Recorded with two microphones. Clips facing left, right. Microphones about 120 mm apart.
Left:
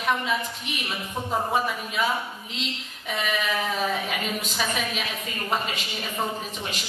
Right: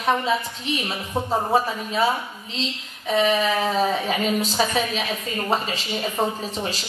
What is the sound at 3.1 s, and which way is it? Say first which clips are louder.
A woman's voice: right 7 dB; 30° right (ahead or behind).